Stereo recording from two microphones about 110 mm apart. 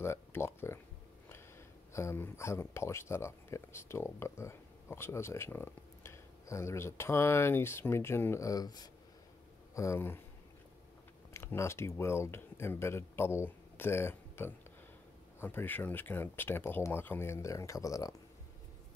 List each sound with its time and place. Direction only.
0.0 s speech: 25° left (ahead or behind)
2.0 s speech: 25° left (ahead or behind)
9.8 s speech: 25° left (ahead or behind)
11.3 s speech: 25° left (ahead or behind)